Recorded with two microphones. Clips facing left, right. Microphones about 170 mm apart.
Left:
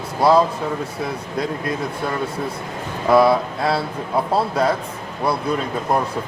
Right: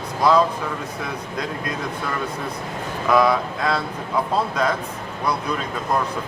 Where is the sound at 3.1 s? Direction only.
30° left (ahead or behind).